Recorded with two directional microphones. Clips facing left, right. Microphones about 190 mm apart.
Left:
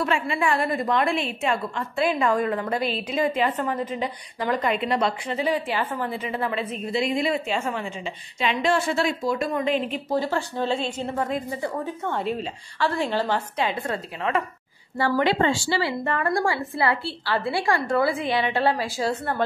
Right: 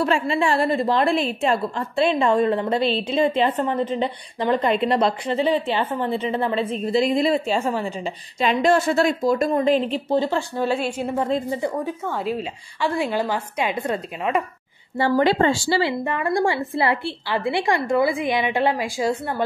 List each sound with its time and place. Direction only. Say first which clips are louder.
0.0 s a woman's voice: right 4 dB; 30° right (ahead or behind)
10.5 s a woman's voice: right 3 dB; 10° right (ahead or behind)
11.2 s a woman's voice: right 5 dB; 25° right (ahead or behind)
11.8 s a woman's voice: right 1 dB; 5° right (ahead or behind); by 15.2 s 25° right (ahead or behind)
15.2 s a woman's voice: right 3 dB; 40° right (ahead or behind)
15.8 s a woman's voice: right 2 dB; 15° right (ahead or behind)
16.4 s a woman's voice: right 3 dB; 25° right (ahead or behind)